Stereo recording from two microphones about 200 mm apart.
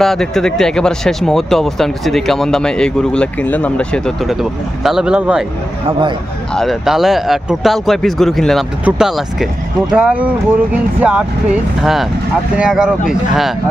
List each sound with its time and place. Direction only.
0.0 s speech: centre (ahead or behind)
5.9 s speech: 25° right (ahead or behind)
6.5 s speech: centre (ahead or behind)